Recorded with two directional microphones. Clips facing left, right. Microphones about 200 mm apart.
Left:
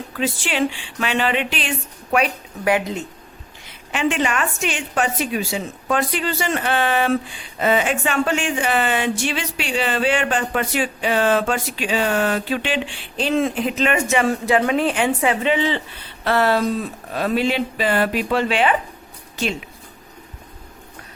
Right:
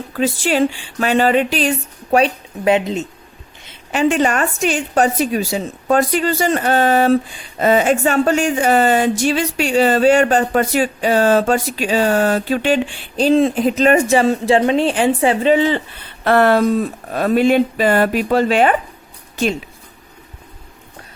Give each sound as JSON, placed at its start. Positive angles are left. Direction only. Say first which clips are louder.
{"t": 0.1, "sound": "a woman's voice", "louder": "right 7 dB", "side_deg": -40}
{"t": 2.1, "sound": "a woman's voice", "louder": "right 5 dB", "side_deg": -25}
{"t": 3.9, "sound": "a woman's voice", "louder": "right 5 dB", "side_deg": -40}
{"t": 14.3, "sound": "a woman's voice", "louder": "right 4 dB", "side_deg": -25}
{"t": 15.5, "sound": "speech", "louder": "right 6 dB", "side_deg": -45}